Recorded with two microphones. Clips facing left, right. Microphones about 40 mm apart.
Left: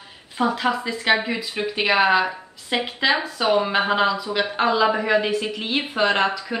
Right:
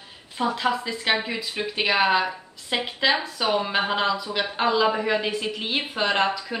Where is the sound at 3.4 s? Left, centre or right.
Left.